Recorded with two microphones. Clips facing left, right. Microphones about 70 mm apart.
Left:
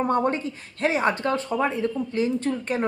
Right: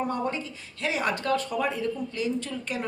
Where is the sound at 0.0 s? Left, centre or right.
Left.